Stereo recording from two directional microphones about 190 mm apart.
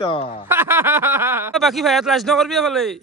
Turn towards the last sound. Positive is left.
turn(degrees=0)  # may be behind; listen again after turning